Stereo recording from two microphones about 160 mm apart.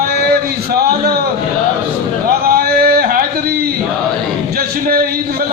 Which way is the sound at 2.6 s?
75° right (ahead or behind).